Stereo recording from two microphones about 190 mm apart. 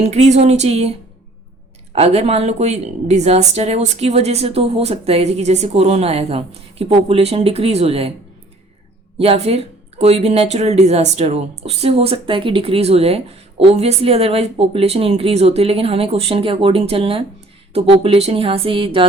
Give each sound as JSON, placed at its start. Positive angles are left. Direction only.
{"t": 0.0, "sound": "speech", "side_deg": -35}
{"t": 2.0, "sound": "speech", "side_deg": -35}
{"t": 9.1, "sound": "speech", "side_deg": -30}